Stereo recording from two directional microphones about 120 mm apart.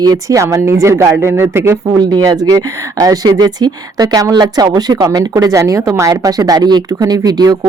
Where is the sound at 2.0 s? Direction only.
35° right (ahead or behind).